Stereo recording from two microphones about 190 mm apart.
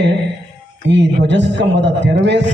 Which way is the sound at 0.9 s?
65° right (ahead or behind).